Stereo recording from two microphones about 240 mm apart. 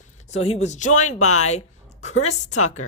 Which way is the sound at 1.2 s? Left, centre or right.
Left.